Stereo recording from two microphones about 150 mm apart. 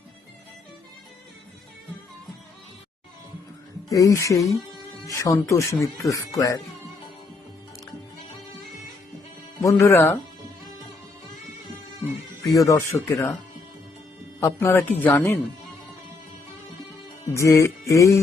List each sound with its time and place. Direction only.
3.8 s speech: 20° left (ahead or behind)
9.6 s speech: 15° left (ahead or behind)
12.5 s speech: 20° left (ahead or behind)
14.4 s speech: 15° left (ahead or behind)
17.3 s speech: 20° left (ahead or behind)